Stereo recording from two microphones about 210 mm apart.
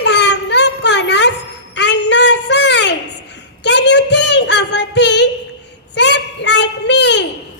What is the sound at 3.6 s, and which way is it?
Child singing, 55° left (ahead or behind).